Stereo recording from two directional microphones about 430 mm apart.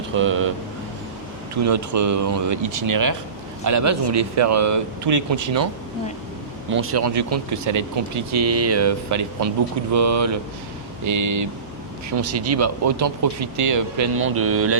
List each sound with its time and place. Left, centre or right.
0.2 s speech: right
1.6 s speech: right
6.7 s speech: right
14.2 s speech: right